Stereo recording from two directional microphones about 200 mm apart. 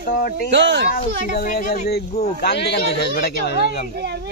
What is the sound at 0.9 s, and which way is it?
Speech, 45° left (ahead or behind).